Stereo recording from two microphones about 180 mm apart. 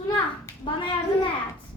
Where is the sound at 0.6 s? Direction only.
30° left (ahead or behind).